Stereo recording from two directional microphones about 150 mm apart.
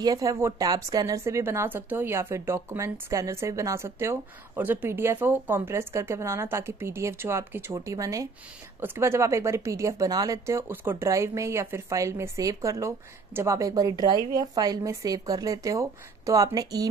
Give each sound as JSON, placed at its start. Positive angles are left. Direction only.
{"t": 0.0, "sound": "a woman's voice", "side_deg": -25}